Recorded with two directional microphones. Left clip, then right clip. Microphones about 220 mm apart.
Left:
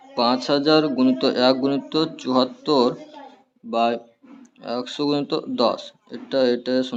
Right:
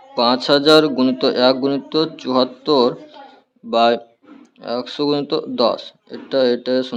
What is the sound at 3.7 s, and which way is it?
Speech, 20° right (ahead or behind).